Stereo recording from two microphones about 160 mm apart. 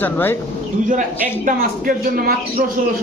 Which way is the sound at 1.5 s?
65° right (ahead or behind).